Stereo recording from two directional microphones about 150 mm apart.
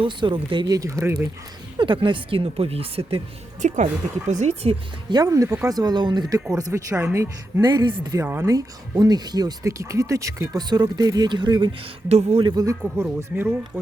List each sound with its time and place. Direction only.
0.0 s speech: 35° right (ahead or behind)
1.8 s speech: 35° right (ahead or behind)
3.6 s speech: 55° right (ahead or behind); by 7.6 s 15° right (ahead or behind)
7.7 s speech: 30° right (ahead or behind)
8.2 s speech: 15° right (ahead or behind)
12.0 s speech: 45° right (ahead or behind)
12.5 s speech: 25° right (ahead or behind)
12.8 s speech: 10° right (ahead or behind)